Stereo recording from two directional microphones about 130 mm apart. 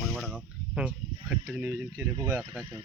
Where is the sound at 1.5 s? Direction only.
15° right (ahead or behind).